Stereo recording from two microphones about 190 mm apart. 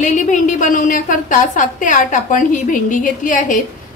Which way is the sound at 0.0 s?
40° left (ahead or behind).